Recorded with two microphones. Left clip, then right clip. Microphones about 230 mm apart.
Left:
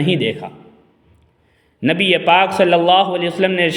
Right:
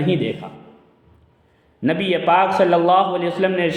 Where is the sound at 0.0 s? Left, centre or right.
Left.